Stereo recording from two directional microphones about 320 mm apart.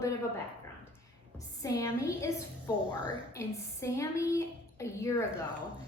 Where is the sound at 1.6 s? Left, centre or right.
Centre.